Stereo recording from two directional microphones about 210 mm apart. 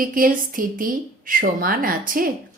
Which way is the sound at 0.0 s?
40° right (ahead or behind).